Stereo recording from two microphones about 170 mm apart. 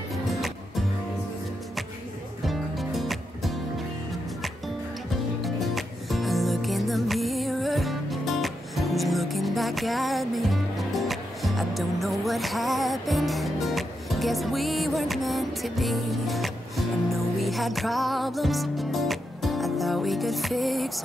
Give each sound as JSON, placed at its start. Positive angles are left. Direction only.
{"t": 0.1, "sound": "music", "side_deg": 0}
{"t": 2.4, "sound": "music", "side_deg": 0}
{"t": 5.4, "sound": "music", "side_deg": 0}